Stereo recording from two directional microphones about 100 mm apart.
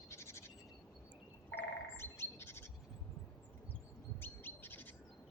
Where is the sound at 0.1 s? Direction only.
30° left (ahead or behind).